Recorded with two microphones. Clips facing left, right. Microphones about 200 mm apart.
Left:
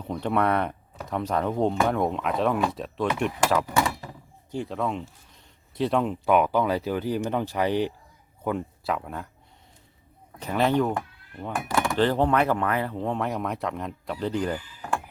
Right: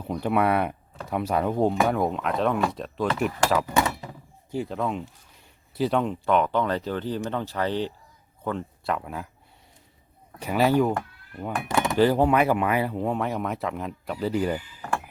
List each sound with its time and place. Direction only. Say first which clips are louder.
0.0 s speech: right 1 dB; 10° right (ahead or behind)
4.0 s door: right 1 dB; 20° right (ahead or behind)
4.5 s speech: right 1 dB; centre (ahead or behind)
10.4 s speech: right 2 dB; 5° right (ahead or behind)
11.7 s a sound: right 1 dB; 20° right (ahead or behind)
11.9 s speech: right 3 dB; 10° right (ahead or behind)